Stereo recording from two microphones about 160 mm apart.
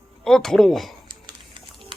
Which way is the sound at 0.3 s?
5° left (ahead or behind).